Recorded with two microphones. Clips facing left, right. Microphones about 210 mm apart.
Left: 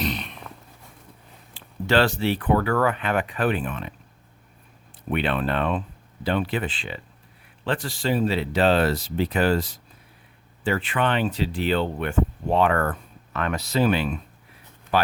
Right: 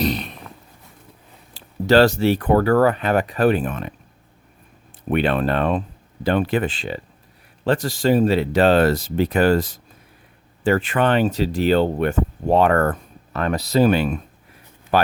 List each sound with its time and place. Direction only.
0.0 s a sound: 40° right (ahead or behind)
1.5 s speech: 40° right (ahead or behind)
5.0 s speech: 45° right (ahead or behind)